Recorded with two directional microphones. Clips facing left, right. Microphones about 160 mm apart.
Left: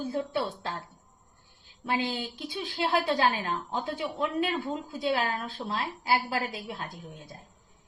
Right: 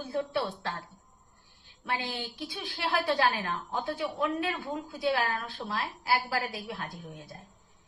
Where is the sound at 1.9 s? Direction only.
20° left (ahead or behind).